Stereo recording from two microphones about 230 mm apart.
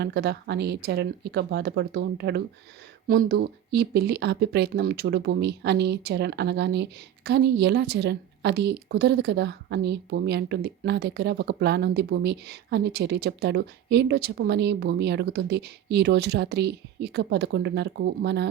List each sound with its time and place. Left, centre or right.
0.0 s a woman's voice: right